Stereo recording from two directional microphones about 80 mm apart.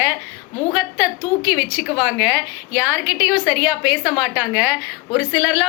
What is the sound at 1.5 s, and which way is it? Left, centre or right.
A woman's voice, right.